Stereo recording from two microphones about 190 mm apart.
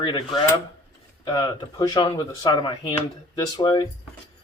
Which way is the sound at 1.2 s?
25° left (ahead or behind).